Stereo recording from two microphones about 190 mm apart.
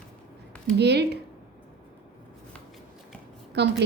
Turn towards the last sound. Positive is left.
turn(degrees=-60)  # may be behind; listen again after turning